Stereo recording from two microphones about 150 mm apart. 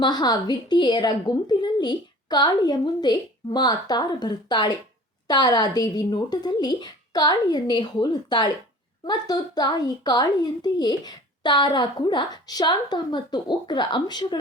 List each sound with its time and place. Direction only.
0.0 s a woman's voice: 25° left (ahead or behind)